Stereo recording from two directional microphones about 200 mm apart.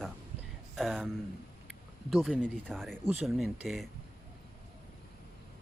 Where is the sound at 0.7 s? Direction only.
Centre (ahead or behind).